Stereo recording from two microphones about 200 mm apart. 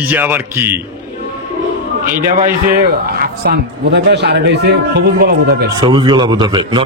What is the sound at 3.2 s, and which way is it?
A man's voice, 55° right (ahead or behind).